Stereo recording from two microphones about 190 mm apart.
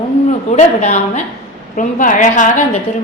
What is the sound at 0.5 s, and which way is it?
A woman's voice, 40° left (ahead or behind).